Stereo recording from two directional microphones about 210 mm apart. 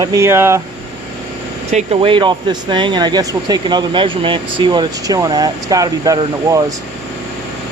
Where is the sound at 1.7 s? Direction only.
30° right (ahead or behind).